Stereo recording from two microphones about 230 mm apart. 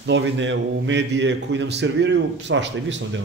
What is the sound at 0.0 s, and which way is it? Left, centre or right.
A man's voice, right.